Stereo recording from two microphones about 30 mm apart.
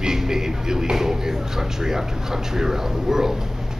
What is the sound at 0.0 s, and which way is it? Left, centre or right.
A man's voice, centre.